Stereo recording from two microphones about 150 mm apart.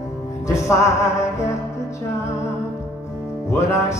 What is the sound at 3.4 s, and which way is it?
Music, 20° left (ahead or behind).